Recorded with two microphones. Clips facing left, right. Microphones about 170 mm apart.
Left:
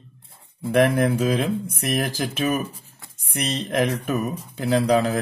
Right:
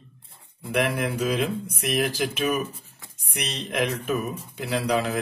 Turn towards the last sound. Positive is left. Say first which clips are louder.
# left 5 dB
turn(degrees=45)  # may be behind; listen again after turning